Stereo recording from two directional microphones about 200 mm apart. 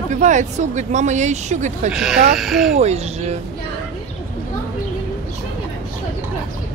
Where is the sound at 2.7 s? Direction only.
30° right (ahead or behind).